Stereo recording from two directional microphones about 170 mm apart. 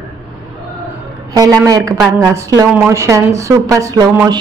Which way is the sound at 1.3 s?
20° right (ahead or behind).